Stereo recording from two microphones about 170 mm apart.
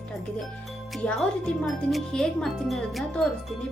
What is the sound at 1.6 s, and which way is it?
Speech, centre (ahead or behind).